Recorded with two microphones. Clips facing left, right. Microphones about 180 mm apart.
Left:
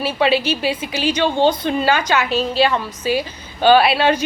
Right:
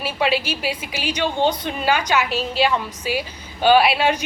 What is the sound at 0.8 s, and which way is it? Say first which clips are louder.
A woman's voice: left 5 dB; 10° right (ahead or behind).